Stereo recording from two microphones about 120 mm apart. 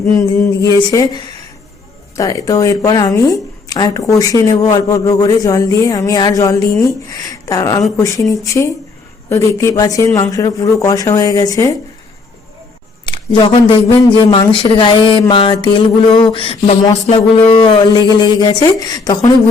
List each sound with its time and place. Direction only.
0.1 s speech: 25° left (ahead or behind)
13.1 s speech: 40° left (ahead or behind)
14.3 s a sound: 45° left (ahead or behind)
17.5 s speech: 45° left (ahead or behind)